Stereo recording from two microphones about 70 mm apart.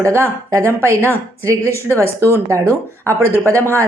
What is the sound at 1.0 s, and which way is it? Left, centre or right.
A woman's voice, right.